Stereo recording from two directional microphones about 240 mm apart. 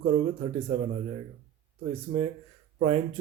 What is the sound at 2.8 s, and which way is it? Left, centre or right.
Speech, right.